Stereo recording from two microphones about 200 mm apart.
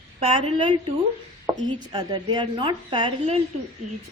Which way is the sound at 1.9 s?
20° right (ahead or behind).